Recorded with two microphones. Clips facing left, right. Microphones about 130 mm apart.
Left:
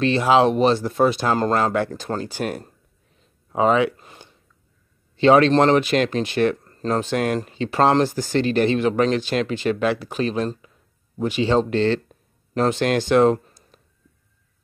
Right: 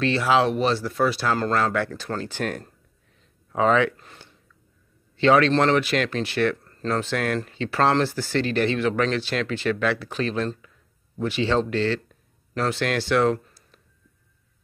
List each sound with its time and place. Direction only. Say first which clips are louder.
0.0 s speech: left 4 dB; 20° left (ahead or behind)